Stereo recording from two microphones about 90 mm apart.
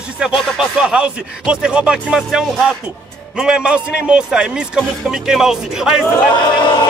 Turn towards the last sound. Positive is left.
turn(degrees=55)  # may be behind; listen again after turning